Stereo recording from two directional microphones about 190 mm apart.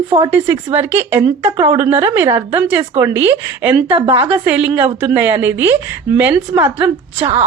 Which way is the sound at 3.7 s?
25° right (ahead or behind).